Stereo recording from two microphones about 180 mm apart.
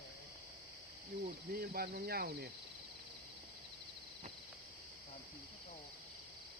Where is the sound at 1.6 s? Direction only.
55° right (ahead or behind).